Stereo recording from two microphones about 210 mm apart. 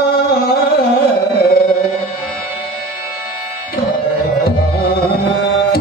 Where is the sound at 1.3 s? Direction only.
50° left (ahead or behind).